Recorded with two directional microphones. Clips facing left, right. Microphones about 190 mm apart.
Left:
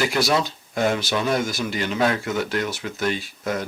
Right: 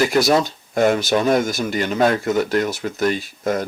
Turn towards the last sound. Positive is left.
turn(degrees=-45)  # may be behind; listen again after turning